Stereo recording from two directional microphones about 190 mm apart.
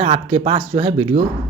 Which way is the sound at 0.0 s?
35° right (ahead or behind).